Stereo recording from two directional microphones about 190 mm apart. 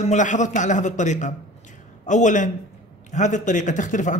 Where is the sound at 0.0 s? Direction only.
40° left (ahead or behind).